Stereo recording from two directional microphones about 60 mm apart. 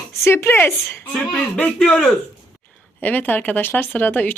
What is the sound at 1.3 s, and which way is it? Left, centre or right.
Speech, left.